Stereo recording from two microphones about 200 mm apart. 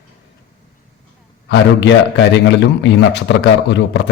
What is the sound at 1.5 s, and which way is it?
A man's voice, 60° left (ahead or behind).